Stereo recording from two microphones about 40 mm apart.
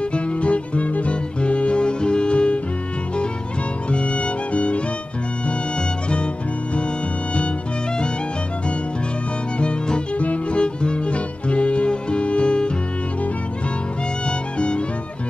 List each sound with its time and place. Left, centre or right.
0.1 s music: left
3.9 s music: left
9.6 s music: left